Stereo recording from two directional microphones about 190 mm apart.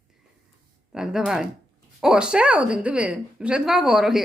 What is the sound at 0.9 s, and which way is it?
A woman's voice, 5° right (ahead or behind).